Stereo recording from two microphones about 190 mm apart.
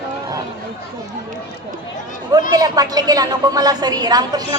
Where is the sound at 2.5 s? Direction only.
20° right (ahead or behind).